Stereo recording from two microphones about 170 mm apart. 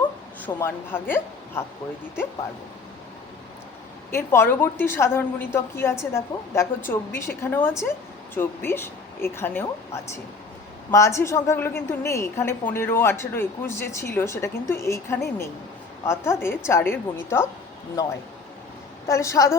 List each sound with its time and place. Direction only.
0.4 s a woman's voice: 10° left (ahead or behind)
4.1 s a woman's voice: 15° left (ahead or behind)
19.0 s a woman's voice: 20° left (ahead or behind)